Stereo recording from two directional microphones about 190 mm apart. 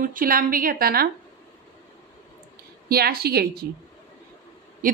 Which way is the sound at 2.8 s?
55° right (ahead or behind).